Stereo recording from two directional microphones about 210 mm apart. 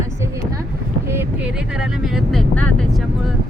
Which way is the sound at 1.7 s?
Centre (ahead or behind).